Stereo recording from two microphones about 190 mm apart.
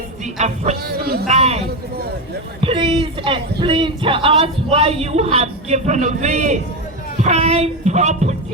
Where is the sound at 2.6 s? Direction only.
30° right (ahead or behind).